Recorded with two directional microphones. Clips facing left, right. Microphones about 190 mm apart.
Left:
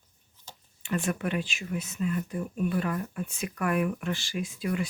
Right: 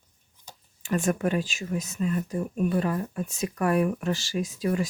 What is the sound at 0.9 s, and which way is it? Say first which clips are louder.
Speech: right 4 dB; 45° right (ahead or behind).